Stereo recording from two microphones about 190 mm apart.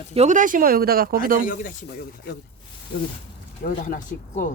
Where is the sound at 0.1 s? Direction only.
35° right (ahead or behind).